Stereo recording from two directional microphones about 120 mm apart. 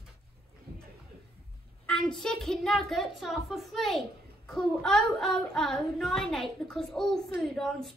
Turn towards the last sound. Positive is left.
turn(degrees=5)  # may be behind; listen again after turning